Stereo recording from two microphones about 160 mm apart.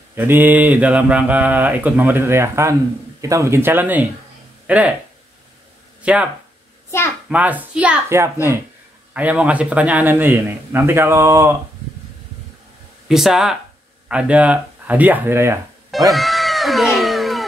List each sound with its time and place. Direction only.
0.1 s speech: 10° right (ahead or behind)
6.0 s speech: 10° right (ahead or behind)
7.2 s speech: 10° right (ahead or behind)
13.1 s speech: 5° right (ahead or behind)
16.1 s music: centre (ahead or behind)